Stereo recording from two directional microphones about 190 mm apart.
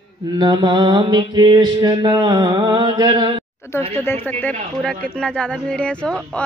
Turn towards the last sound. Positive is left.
turn(degrees=5)  # may be behind; listen again after turning